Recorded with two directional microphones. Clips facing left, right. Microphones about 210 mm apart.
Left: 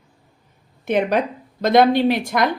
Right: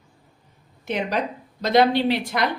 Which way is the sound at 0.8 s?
55° left (ahead or behind).